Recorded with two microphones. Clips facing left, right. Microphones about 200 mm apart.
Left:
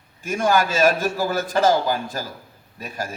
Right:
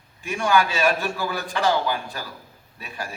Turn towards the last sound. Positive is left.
turn(degrees=40)  # may be behind; listen again after turning